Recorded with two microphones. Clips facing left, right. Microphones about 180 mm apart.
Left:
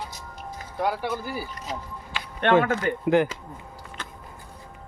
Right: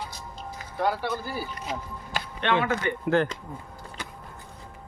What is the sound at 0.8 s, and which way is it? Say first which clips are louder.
Speech: even; 10° left (ahead or behind).